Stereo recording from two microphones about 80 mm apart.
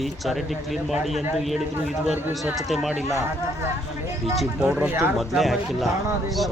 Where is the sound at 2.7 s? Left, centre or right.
Centre.